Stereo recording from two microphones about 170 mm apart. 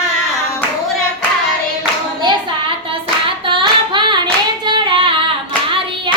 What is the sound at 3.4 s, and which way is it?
Child singing, 30° right (ahead or behind).